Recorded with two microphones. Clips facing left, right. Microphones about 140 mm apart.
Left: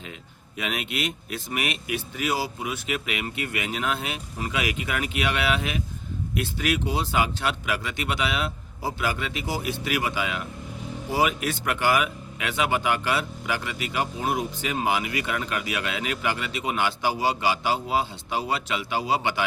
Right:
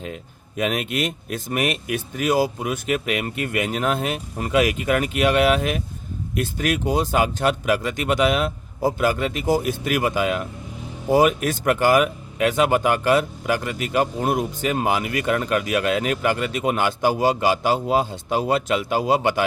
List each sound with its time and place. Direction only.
0.0 s speech: 45° right (ahead or behind)